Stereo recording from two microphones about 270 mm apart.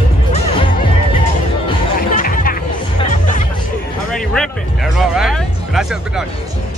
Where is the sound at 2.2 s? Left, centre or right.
Left.